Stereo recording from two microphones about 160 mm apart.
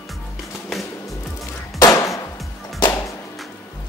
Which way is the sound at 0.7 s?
Centre (ahead or behind).